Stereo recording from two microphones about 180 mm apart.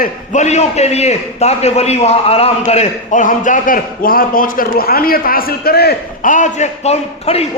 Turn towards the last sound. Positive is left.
turn(degrees=35)  # may be behind; listen again after turning